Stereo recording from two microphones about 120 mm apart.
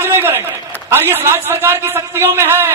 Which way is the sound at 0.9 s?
20° right (ahead or behind).